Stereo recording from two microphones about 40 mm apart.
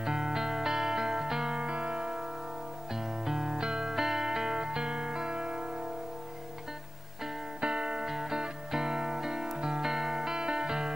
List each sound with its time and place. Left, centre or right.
0.0 s music: centre
1.6 s music: right
7.6 s music: centre